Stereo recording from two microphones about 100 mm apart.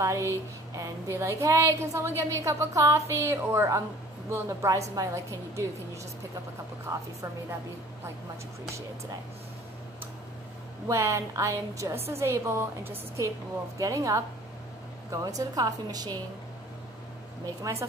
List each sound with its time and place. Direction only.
0.0 s a woman's voice: 30° right (ahead or behind)
6.9 s a woman's voice: 30° right (ahead or behind)
10.9 s a woman's voice: 30° right (ahead or behind)
17.6 s a woman's voice: 30° right (ahead or behind)